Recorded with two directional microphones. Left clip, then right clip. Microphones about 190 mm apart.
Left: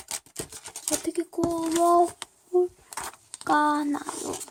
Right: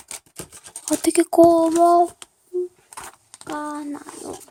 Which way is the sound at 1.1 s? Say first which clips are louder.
Right 17 dB; 45° right (ahead or behind).